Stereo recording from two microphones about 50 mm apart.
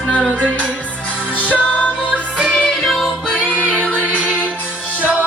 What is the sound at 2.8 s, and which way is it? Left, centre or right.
Music, centre.